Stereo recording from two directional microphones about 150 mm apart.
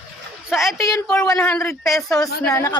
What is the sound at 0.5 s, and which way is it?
Speech, centre (ahead or behind).